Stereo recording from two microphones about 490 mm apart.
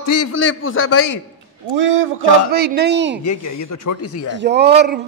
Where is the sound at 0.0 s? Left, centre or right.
Left.